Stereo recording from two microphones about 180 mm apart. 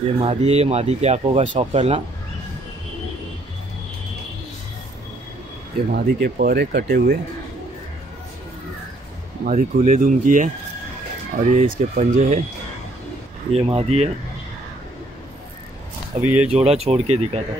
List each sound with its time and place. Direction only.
0.0 s speech: 35° right (ahead or behind)
5.9 s speech: 55° right (ahead or behind)
9.4 s speech: 50° right (ahead or behind)
13.5 s speech: 35° right (ahead or behind)
16.4 s speech: 35° right (ahead or behind)